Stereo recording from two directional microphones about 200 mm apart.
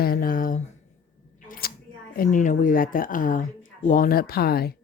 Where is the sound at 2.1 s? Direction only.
40° left (ahead or behind).